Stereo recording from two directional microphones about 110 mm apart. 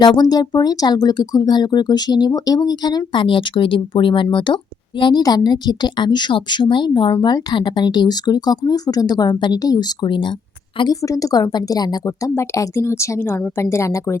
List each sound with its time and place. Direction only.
0.0 s speech: 40° left (ahead or behind)
11.0 s a woman's voice: 30° left (ahead or behind)